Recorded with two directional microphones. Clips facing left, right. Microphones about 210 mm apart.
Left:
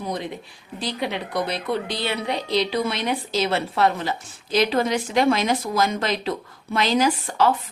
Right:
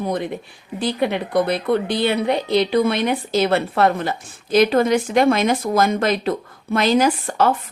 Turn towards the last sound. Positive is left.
turn(degrees=-50)  # may be behind; listen again after turning